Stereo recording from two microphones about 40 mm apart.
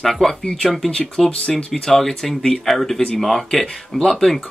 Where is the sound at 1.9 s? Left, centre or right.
Centre.